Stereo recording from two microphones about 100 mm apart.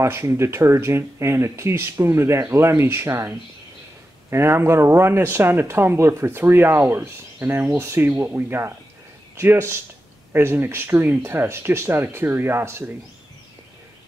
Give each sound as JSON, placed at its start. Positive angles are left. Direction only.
{"t": 0.0, "sound": "speech", "side_deg": -25}